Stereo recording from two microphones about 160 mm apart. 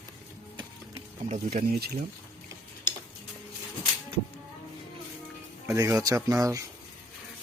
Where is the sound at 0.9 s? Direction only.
45° right (ahead or behind).